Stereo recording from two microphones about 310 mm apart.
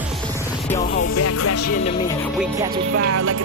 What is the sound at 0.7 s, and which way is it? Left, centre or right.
Music, left.